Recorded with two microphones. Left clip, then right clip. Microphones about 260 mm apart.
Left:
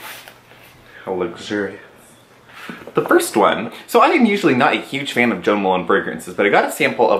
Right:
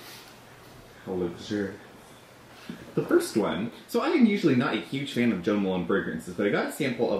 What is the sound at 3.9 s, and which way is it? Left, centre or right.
Speech, centre.